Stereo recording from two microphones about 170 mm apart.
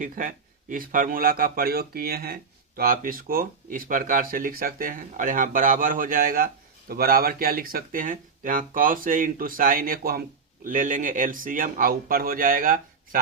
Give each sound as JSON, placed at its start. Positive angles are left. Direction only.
{"t": 0.0, "sound": "a man's voice", "side_deg": -50}